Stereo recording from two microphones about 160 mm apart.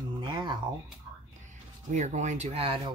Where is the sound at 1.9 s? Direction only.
50° right (ahead or behind).